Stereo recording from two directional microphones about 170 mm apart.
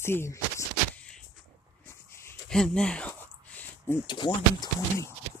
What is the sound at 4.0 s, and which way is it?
Speech, 25° left (ahead or behind).